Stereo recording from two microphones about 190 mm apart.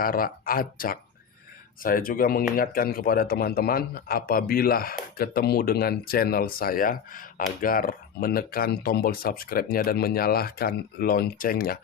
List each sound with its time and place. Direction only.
0.0 s speech: 50° left (ahead or behind)